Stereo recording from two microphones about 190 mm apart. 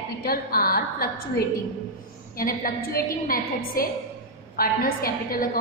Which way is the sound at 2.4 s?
50° left (ahead or behind).